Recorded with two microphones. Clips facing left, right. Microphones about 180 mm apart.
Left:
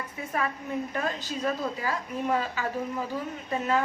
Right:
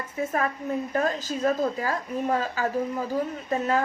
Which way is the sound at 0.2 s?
45° right (ahead or behind).